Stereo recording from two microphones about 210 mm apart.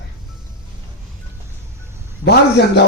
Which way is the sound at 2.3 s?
55° left (ahead or behind).